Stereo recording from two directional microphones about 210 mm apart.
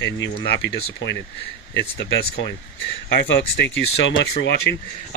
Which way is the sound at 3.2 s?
55° left (ahead or behind).